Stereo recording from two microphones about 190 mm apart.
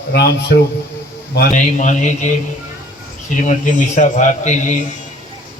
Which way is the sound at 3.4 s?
40° left (ahead or behind).